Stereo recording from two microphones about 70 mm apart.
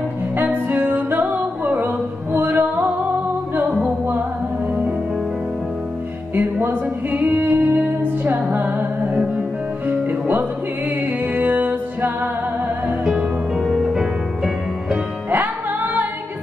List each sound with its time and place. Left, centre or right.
0.4 s music: right
6.3 s music: right
13.0 s music: centre
15.2 s music: right